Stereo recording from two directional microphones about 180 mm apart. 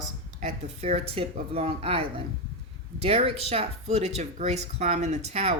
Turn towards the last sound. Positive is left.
turn(degrees=-35)  # may be behind; listen again after turning